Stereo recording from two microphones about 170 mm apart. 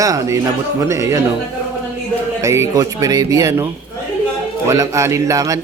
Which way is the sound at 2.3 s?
15° right (ahead or behind).